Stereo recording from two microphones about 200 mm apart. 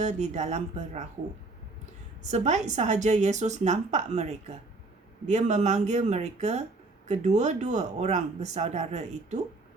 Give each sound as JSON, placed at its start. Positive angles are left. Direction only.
{"t": 0.0, "sound": "speech", "side_deg": -35}
{"t": 2.3, "sound": "speech", "side_deg": -35}